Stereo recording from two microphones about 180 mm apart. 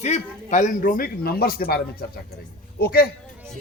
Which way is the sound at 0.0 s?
40° left (ahead or behind).